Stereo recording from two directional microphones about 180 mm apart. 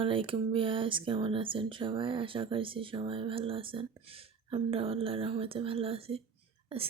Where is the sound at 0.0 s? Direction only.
30° right (ahead or behind).